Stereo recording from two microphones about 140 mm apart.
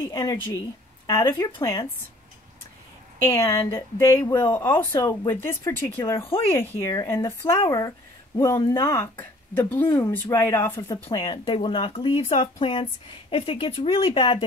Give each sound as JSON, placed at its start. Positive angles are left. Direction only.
{"t": 0.1, "sound": "speech", "side_deg": 25}
{"t": 3.2, "sound": "speech", "side_deg": 20}
{"t": 11.1, "sound": "speech", "side_deg": 35}